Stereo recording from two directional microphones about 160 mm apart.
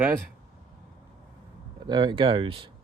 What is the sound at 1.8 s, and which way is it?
Speech, 30° right (ahead or behind).